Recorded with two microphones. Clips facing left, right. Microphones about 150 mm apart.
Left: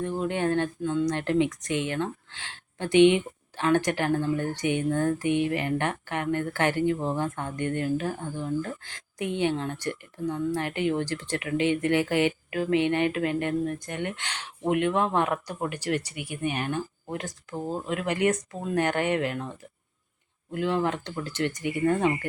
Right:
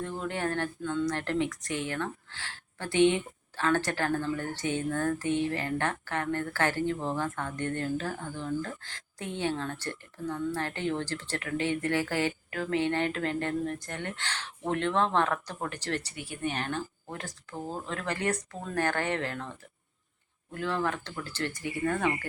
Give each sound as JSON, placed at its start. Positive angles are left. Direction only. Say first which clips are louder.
{"t": 0.0, "sound": "speech", "louder": "left 5 dB", "side_deg": 20}